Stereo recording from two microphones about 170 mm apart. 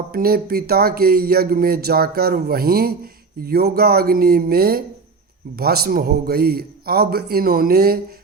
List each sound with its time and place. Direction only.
0.1 s speech: 60° right (ahead or behind)